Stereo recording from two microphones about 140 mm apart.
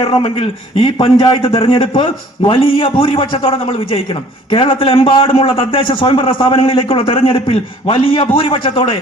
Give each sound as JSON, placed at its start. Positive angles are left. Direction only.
{"t": 0.0, "sound": "a man's voice", "side_deg": 40}
{"t": 1.9, "sound": "a man's voice", "side_deg": 30}